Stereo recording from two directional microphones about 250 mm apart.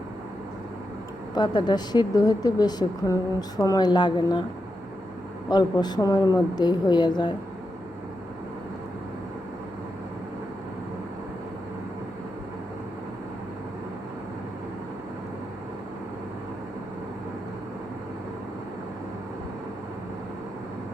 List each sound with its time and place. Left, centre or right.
1.3 s a woman's voice: centre
5.5 s a woman's voice: centre